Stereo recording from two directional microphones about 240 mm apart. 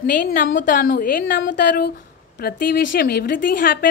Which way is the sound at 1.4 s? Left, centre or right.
Left.